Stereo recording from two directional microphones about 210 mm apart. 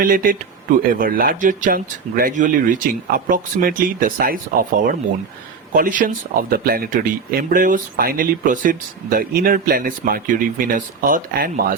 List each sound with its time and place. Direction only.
0.0 s speech: 40° right (ahead or behind)
5.7 s speech: 40° right (ahead or behind)